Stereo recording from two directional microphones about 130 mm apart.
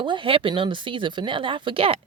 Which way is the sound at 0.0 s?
40° right (ahead or behind).